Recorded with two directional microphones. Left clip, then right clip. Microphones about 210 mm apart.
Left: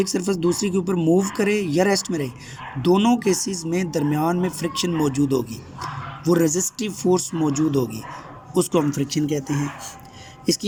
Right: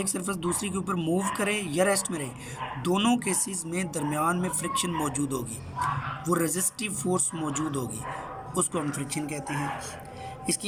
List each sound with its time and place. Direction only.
0.0 s a man's voice: 20° left (ahead or behind)